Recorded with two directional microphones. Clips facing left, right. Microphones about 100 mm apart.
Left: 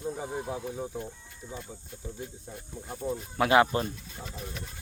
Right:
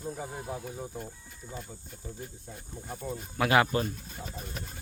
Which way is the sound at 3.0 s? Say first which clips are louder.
Left 3 dB; 25° left (ahead or behind).